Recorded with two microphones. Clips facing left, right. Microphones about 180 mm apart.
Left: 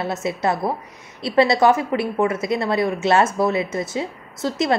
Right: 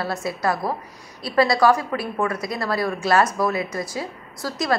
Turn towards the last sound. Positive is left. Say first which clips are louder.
# left 3 dB
turn(degrees=25)  # may be behind; listen again after turning